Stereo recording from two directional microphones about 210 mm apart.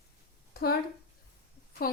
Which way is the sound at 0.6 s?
45° left (ahead or behind).